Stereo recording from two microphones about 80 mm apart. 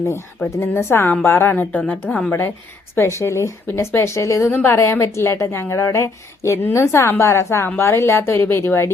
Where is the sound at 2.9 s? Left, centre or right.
Left.